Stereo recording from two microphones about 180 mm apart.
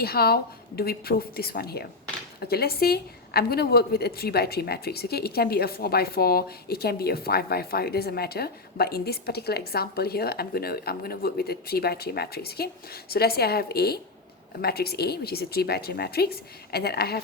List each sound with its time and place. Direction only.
0.0 s a woman's voice: 60° left (ahead or behind)